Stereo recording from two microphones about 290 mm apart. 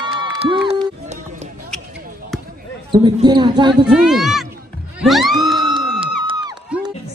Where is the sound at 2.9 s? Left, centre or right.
Centre.